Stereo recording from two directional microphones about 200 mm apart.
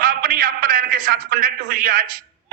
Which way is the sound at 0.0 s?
45° right (ahead or behind).